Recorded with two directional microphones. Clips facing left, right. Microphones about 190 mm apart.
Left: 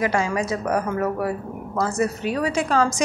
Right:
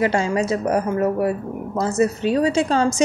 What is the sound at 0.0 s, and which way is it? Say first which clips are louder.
A woman's voice: right 3 dB; 25° right (ahead or behind).